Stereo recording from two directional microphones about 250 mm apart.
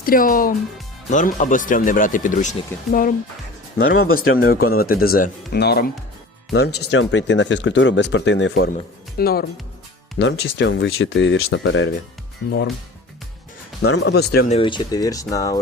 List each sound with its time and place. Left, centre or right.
0.0 s speech: left
13.8 s speech: left
14.5 s speech: centre